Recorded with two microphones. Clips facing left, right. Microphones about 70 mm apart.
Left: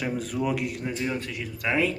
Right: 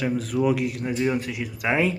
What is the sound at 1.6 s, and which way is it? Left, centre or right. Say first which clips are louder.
Speech: right 2 dB; right.